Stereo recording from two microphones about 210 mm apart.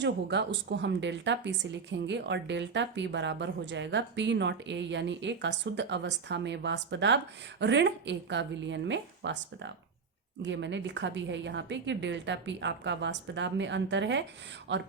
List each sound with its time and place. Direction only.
0.0 s a woman's voice: 55° right (ahead or behind)